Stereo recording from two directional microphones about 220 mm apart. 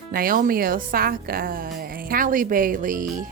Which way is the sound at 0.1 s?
40° right (ahead or behind).